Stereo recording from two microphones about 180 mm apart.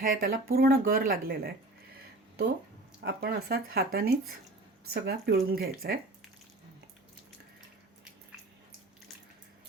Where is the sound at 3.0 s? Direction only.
60° right (ahead or behind).